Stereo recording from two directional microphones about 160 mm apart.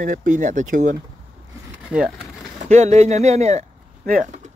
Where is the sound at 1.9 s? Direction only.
5° right (ahead or behind).